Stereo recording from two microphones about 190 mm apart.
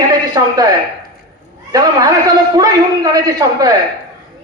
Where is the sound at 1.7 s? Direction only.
20° right (ahead or behind).